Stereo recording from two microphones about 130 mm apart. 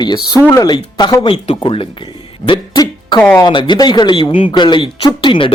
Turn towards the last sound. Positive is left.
turn(degrees=40)  # may be behind; listen again after turning